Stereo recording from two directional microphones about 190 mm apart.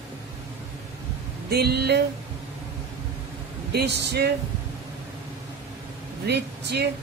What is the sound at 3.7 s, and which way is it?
Speech, 60° right (ahead or behind).